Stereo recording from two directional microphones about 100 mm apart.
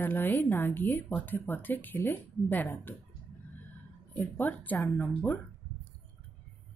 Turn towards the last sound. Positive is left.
turn(degrees=20)  # may be behind; listen again after turning